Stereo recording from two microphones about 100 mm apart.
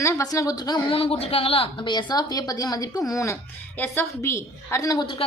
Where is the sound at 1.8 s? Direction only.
50° left (ahead or behind).